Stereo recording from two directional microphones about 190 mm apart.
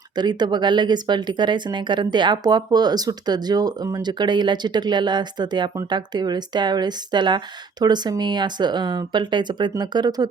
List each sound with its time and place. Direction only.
0.2 s speech: 20° right (ahead or behind)